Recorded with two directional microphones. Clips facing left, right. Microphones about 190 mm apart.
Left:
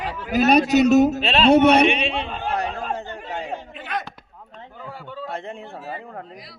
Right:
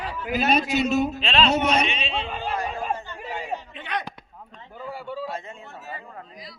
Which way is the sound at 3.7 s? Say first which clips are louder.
Left 3 dB; 5° left (ahead or behind).